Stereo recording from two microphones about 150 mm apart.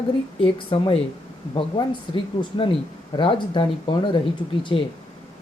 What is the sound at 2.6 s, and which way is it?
Speech, 35° left (ahead or behind).